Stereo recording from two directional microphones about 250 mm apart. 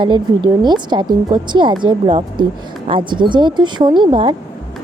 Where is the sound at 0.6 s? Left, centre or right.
Centre.